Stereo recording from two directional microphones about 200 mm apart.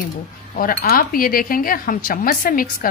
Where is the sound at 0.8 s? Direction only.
45° left (ahead or behind).